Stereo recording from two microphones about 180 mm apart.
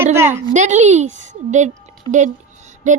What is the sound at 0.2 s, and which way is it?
Speech, 15° right (ahead or behind).